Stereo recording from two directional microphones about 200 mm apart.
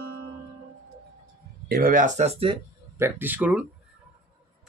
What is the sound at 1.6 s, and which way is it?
Speech, 45° right (ahead or behind).